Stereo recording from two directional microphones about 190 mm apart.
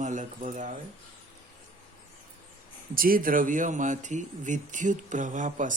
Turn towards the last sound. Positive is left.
turn(degrees=-40)  # may be behind; listen again after turning